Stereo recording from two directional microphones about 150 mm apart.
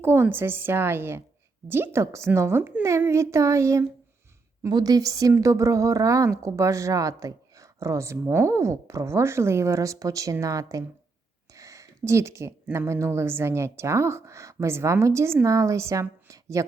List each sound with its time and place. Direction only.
0.0 s a woman's voice: 15° right (ahead or behind)